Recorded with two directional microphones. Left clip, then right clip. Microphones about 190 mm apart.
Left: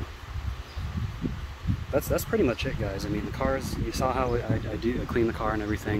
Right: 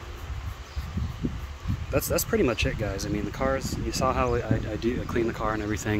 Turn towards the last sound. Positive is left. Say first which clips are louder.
# right 1 dB
turn(degrees=-20)  # may be behind; listen again after turning